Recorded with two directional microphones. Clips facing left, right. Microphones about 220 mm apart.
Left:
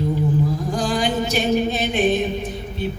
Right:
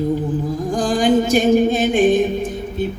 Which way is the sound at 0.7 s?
50° right (ahead or behind).